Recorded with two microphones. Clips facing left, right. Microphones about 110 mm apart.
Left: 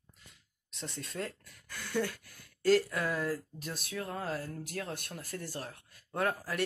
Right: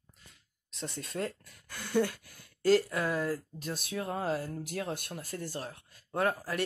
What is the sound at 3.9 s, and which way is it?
Speech, 20° right (ahead or behind).